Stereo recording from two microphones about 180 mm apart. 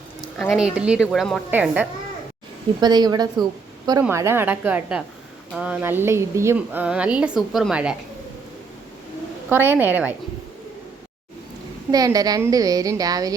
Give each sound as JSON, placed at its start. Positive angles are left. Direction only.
{"t": 0.2, "sound": "a woman's voice", "side_deg": 0}
{"t": 2.8, "sound": "a woman's voice", "side_deg": -25}
{"t": 9.5, "sound": "a woman's voice", "side_deg": -10}
{"t": 11.9, "sound": "a woman's voice", "side_deg": -20}